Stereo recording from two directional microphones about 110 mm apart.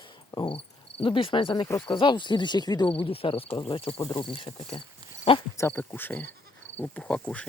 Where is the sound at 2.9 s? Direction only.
55° left (ahead or behind).